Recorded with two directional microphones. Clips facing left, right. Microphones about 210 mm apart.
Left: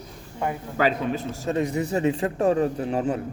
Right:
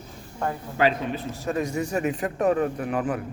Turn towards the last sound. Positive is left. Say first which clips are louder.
# left 2 dB
turn(degrees=25)  # may be behind; listen again after turning